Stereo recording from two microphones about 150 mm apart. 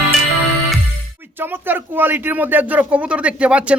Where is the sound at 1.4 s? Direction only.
15° right (ahead or behind).